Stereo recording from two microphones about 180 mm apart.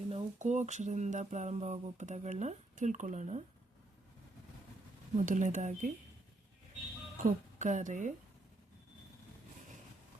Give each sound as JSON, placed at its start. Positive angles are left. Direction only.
{"t": 0.1, "sound": "a sound", "side_deg": -40}
{"t": 5.1, "sound": "speech", "side_deg": -45}
{"t": 7.2, "sound": "speech", "side_deg": -45}